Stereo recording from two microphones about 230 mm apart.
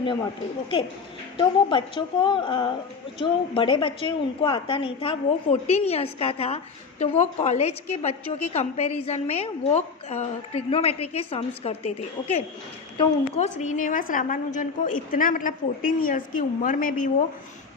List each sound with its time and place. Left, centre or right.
1.4 s a woman's voice: left